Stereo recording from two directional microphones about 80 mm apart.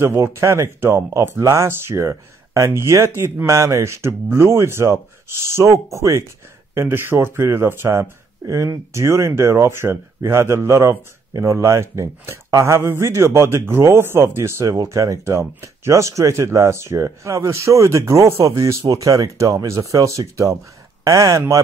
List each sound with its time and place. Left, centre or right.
0.0 s speech: right